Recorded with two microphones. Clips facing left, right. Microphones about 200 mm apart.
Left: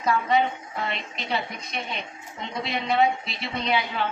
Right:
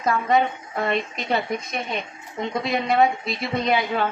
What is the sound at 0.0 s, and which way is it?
A woman's voice, 50° right (ahead or behind).